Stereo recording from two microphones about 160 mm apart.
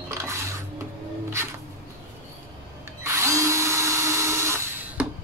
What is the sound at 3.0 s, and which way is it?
Drill, 20° right (ahead or behind).